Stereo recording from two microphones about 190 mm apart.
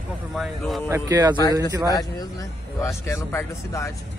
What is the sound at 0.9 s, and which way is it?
Speech, 15° right (ahead or behind).